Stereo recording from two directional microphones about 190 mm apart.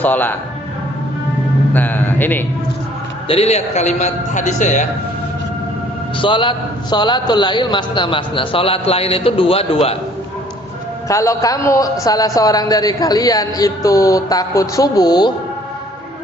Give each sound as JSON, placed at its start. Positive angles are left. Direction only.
{"t": 0.0, "sound": "a man's voice", "side_deg": 10}
{"t": 1.7, "sound": "music", "side_deg": 10}
{"t": 3.2, "sound": "a man's voice", "side_deg": 35}
{"t": 6.1, "sound": "a man's voice", "side_deg": 25}
{"t": 11.1, "sound": "a man's voice", "side_deg": 15}